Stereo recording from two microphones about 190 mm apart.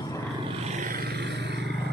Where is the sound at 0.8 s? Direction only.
45° right (ahead or behind).